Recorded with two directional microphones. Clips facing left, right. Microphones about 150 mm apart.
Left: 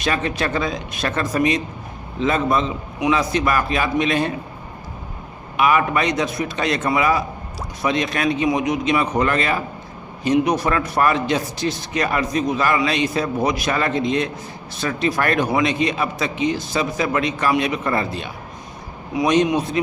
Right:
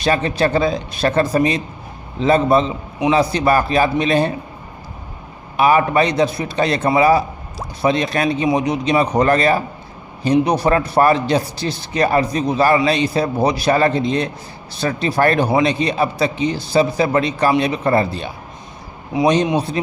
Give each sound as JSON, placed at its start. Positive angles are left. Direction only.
{"t": 0.0, "sound": "a man's voice", "side_deg": -30}
{"t": 5.5, "sound": "a man's voice", "side_deg": -35}